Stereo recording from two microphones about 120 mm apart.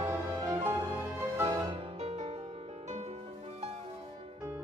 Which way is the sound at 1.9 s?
65° right (ahead or behind).